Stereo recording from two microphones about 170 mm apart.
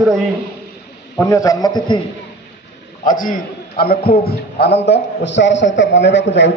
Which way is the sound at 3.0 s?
50° left (ahead or behind).